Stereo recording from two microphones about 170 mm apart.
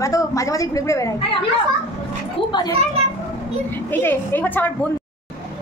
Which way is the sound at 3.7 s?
10° left (ahead or behind).